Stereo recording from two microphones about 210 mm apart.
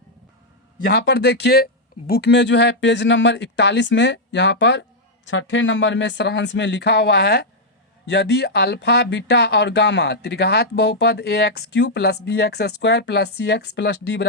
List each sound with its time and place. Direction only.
0.9 s speech: 55° left (ahead or behind)